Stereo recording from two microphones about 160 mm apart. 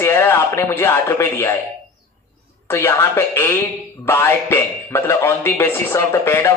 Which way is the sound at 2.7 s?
15° left (ahead or behind).